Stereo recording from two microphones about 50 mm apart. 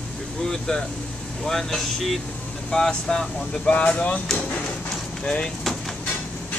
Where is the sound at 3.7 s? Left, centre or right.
Left.